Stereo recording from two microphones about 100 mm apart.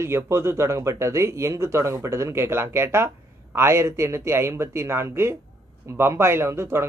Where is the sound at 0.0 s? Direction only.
25° right (ahead or behind).